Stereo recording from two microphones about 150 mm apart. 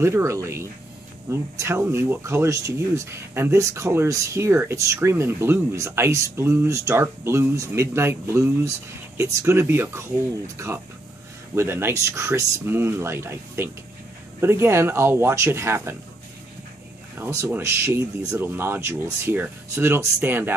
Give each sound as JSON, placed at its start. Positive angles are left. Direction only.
{"t": 0.0, "sound": "speech", "side_deg": -20}
{"t": 17.2, "sound": "speech", "side_deg": -20}